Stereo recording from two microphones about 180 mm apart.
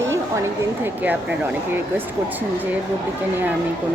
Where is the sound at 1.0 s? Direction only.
10° right (ahead or behind).